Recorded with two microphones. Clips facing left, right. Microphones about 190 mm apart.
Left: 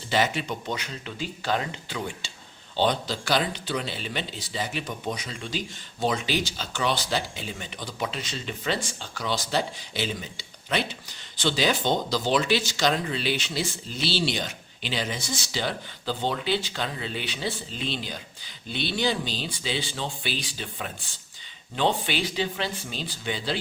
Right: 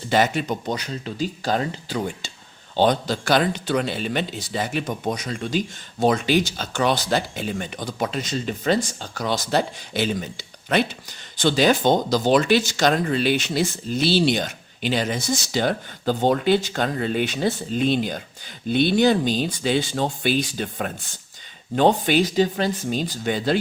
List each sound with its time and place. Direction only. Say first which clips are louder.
0.1 s a man's voice: right 5 dB; 45° right (ahead or behind)